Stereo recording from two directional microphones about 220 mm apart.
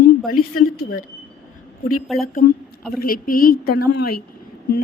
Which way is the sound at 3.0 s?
40° left (ahead or behind).